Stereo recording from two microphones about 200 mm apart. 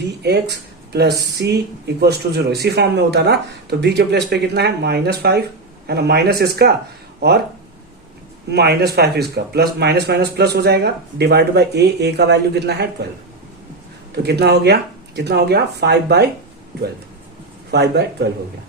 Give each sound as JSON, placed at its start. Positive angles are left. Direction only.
{"t": 0.2, "sound": "speech", "side_deg": -55}
{"t": 8.4, "sound": "speech", "side_deg": -55}
{"t": 14.2, "sound": "speech", "side_deg": -55}
{"t": 17.7, "sound": "speech", "side_deg": -55}